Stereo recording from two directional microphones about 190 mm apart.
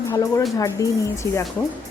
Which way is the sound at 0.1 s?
15° left (ahead or behind).